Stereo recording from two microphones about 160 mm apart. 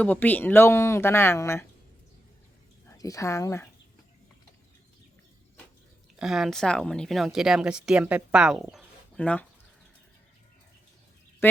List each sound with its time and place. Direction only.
0.0 s speech: 10° left (ahead or behind)
2.8 s speech: 20° left (ahead or behind)
6.1 s speech: centre (ahead or behind)